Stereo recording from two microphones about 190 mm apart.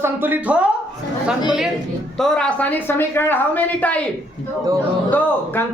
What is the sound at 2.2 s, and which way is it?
A woman's voice, 5° left (ahead or behind).